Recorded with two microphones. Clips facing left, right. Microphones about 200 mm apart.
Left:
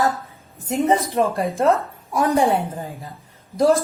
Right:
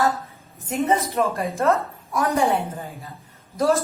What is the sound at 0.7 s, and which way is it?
A woman's voice, 30° left (ahead or behind).